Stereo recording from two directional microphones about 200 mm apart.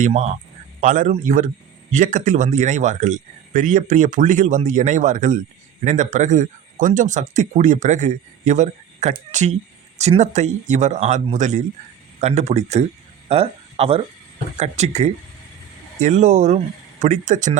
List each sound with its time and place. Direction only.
0.0 s speech: 35° right (ahead or behind)